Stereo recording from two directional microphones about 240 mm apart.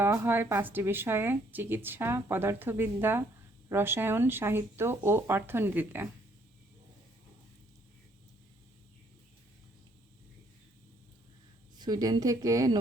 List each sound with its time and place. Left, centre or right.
0.0 s a woman's voice: centre
11.8 s a woman's voice: centre